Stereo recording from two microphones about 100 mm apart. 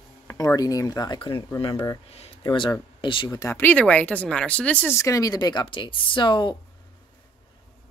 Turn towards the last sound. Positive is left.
turn(degrees=50)  # may be behind; listen again after turning